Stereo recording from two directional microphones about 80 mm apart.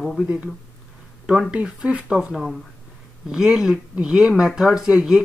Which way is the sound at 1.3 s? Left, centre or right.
Centre.